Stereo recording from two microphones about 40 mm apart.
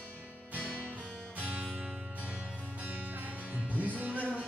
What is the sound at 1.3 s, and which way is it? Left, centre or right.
Music, right.